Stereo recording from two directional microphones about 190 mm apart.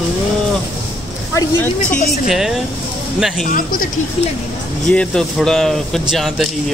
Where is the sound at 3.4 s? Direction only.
45° left (ahead or behind).